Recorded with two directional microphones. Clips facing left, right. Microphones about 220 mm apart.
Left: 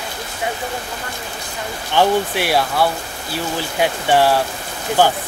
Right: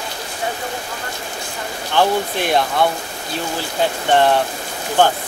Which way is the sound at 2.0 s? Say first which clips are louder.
Left 1 dB; 10° left (ahead or behind).